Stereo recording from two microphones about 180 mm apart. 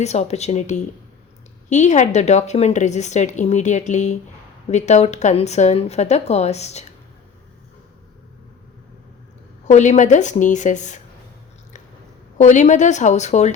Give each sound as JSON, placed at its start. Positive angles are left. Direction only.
{"t": 0.0, "sound": "a woman's voice", "side_deg": 40}
{"t": 9.6, "sound": "a woman's voice", "side_deg": 40}
{"t": 12.5, "sound": "a woman's voice", "side_deg": 40}